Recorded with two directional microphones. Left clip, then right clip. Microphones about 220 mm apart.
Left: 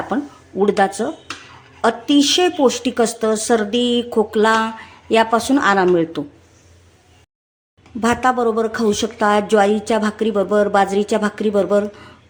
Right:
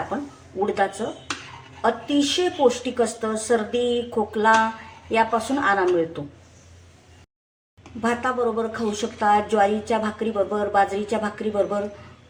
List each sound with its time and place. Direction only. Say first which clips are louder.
0.6 s a woman's voice: left 7 dB; 50° left (ahead or behind)
8.0 s a woman's voice: left 7 dB; 50° left (ahead or behind)